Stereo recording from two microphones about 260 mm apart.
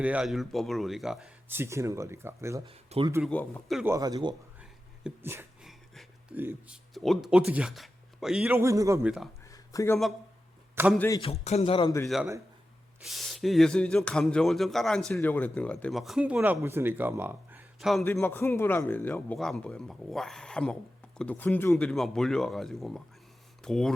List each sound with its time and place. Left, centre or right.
0.0 s speech: centre
3.2 s speech: centre
3.9 s speech: centre
4.6 s speech: centre
9.4 s a sound: centre
10.9 s a man's voice: centre
11.2 s a man's voice: left
12.0 s speech: centre